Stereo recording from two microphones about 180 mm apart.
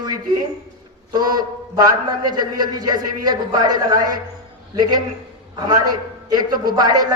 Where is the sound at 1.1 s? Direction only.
20° right (ahead or behind).